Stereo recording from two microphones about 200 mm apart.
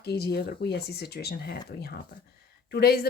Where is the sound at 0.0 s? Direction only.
55° left (ahead or behind).